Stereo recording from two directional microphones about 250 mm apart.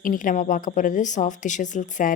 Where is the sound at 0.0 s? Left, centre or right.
Left.